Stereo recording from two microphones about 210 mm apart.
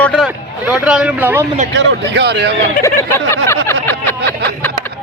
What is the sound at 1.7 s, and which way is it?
Speech, 55° right (ahead or behind).